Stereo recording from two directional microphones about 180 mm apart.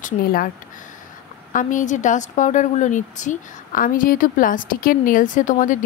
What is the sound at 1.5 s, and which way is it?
A woman's voice, 45° left (ahead or behind).